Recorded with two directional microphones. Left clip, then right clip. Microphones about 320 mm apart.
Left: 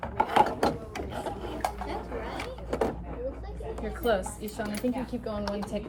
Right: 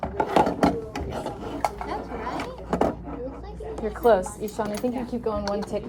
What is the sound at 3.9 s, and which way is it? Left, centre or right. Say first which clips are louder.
A woman's voice: right 8 dB; centre.